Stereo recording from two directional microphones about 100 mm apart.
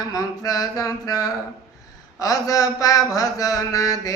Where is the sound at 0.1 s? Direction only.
35° left (ahead or behind).